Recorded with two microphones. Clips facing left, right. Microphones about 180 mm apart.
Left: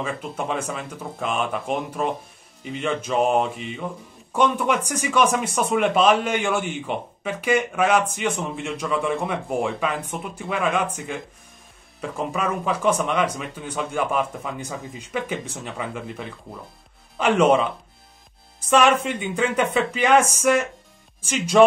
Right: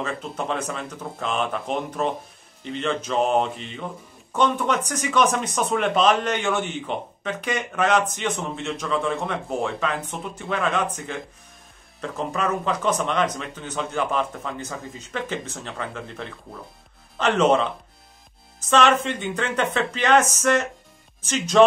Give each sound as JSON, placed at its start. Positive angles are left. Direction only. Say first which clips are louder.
{"t": 0.0, "sound": "speech", "louder": "left 1 dB", "side_deg": 10}
{"t": 18.7, "sound": "speech", "louder": "left 1 dB", "side_deg": 10}